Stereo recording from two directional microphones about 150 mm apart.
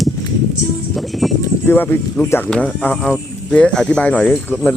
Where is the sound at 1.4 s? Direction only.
15° left (ahead or behind).